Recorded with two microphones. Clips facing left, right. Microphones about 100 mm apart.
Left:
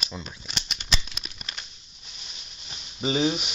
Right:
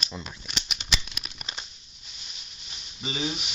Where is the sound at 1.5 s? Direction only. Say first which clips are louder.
Right 1 dB; 25° right (ahead or behind).